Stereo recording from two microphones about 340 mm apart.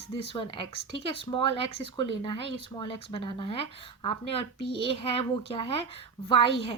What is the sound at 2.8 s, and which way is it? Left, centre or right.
Speech, centre.